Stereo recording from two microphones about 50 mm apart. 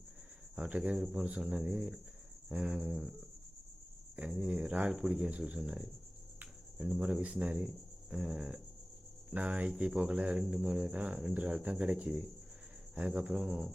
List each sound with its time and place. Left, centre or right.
0.5 s speech: right
2.5 s speech: right
2.9 s speech: centre
4.4 s speech: centre
6.4 s cricket: right
7.0 s speech: right
7.6 s speech: centre
9.3 s speech: right
10.4 s speech: centre
10.9 s speech: right
11.9 s speech: centre